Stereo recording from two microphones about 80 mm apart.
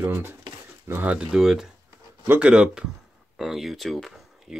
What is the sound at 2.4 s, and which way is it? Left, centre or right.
Speech, centre.